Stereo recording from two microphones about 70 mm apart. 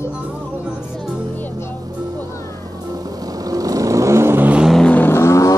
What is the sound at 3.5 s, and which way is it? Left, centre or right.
Vehicle, right.